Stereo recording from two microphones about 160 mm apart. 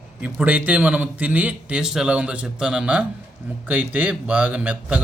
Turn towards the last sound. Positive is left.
turn(degrees=-10)  # may be behind; listen again after turning